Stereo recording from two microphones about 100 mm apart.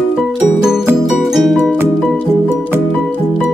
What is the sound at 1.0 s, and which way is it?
Music, 5° right (ahead or behind).